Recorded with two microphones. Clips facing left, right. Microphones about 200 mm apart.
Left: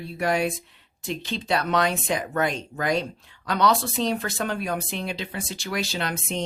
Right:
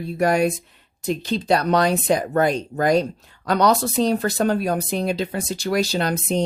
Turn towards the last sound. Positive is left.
turn(degrees=-40)  # may be behind; listen again after turning